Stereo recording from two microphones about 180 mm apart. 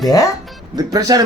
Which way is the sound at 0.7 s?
20° right (ahead or behind).